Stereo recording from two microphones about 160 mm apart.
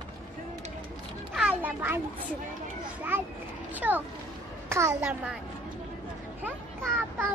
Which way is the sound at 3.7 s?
10° right (ahead or behind).